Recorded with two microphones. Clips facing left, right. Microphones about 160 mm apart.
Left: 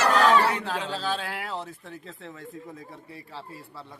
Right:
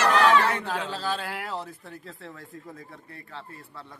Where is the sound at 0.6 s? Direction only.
10° right (ahead or behind).